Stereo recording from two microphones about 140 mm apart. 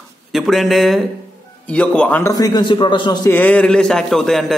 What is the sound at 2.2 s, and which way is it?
A man's voice, 25° left (ahead or behind).